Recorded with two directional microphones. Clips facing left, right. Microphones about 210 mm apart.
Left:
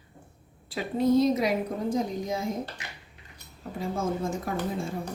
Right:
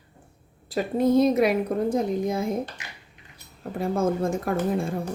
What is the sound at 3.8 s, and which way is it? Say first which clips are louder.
A woman's voice: right 6 dB; 60° right (ahead or behind).